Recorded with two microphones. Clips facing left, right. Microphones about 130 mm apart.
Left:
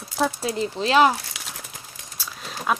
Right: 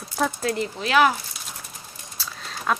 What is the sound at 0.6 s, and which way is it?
Speech, 25° left (ahead or behind).